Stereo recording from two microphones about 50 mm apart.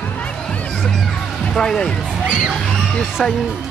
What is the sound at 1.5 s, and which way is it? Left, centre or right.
Speech, centre.